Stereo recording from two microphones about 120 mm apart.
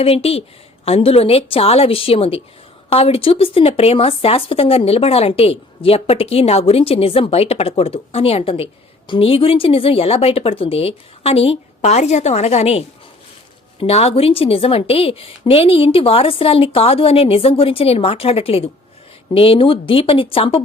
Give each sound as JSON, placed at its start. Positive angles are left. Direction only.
{"t": 0.0, "sound": "a woman's voice", "side_deg": 55}